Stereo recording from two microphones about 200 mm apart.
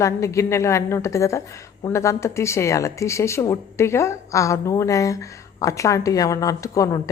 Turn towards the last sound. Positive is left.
turn(degrees=15)  # may be behind; listen again after turning